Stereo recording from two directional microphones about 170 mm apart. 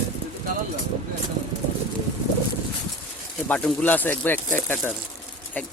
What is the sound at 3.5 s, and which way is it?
Speech, 10° left (ahead or behind).